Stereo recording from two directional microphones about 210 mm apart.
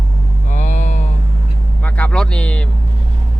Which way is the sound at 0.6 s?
35° left (ahead or behind).